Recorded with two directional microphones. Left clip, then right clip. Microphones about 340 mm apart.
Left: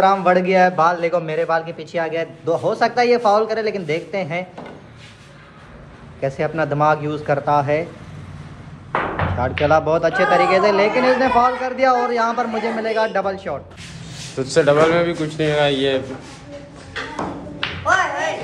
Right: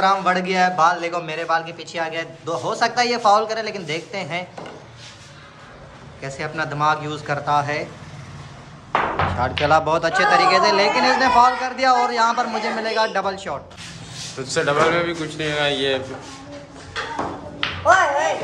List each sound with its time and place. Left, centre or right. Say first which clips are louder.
0.0 s a man's voice: left 3 dB; centre
6.2 s a man's voice: left 6 dB; centre
9.4 s a man's voice: left 2 dB; centre
17.8 s speech: right 3 dB; centre